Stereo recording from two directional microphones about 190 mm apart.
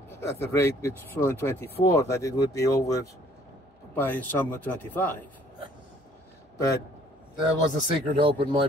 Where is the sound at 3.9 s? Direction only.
10° left (ahead or behind).